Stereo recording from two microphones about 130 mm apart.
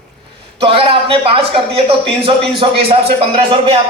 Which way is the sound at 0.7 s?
45° right (ahead or behind).